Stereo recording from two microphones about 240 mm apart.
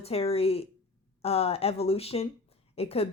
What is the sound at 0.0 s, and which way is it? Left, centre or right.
Speech, left.